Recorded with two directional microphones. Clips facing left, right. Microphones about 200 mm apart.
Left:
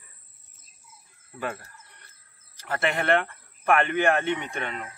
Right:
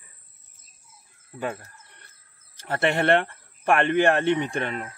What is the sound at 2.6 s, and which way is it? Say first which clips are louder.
Speech: right 4 dB; 30° right (ahead or behind).